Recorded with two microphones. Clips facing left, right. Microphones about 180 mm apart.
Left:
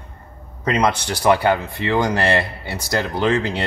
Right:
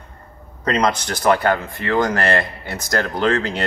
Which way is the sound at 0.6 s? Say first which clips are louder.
Even; 10° left (ahead or behind).